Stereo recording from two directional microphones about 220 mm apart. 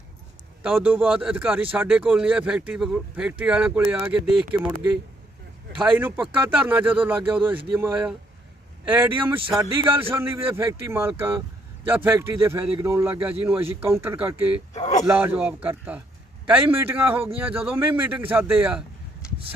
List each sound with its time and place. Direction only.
0.6 s a man's voice: 5° right (ahead or behind)
6.0 s a man's voice: 10° right (ahead or behind)
9.8 s a man's voice: 25° right (ahead or behind)
10.1 s a man's voice: 10° right (ahead or behind)
14.7 s speech: 30° left (ahead or behind)
15.0 s a man's voice: 10° right (ahead or behind)